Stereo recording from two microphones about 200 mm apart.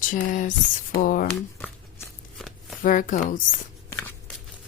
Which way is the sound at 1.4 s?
10° left (ahead or behind).